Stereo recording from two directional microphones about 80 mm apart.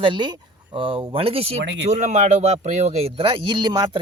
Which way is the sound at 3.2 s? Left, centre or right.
Right.